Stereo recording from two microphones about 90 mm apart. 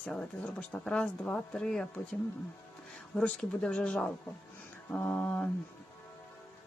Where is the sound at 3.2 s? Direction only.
10° left (ahead or behind).